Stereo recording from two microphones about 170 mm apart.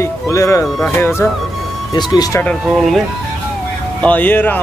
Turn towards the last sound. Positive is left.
turn(degrees=10)  # may be behind; listen again after turning